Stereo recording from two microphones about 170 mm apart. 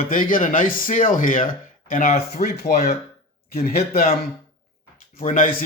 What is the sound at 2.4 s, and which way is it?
Speech, 70° left (ahead or behind).